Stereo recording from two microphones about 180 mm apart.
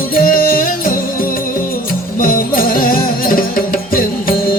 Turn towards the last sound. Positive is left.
turn(degrees=55)  # may be behind; listen again after turning